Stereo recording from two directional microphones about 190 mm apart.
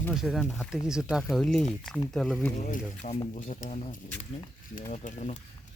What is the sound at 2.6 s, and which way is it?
Speech, 40° left (ahead or behind).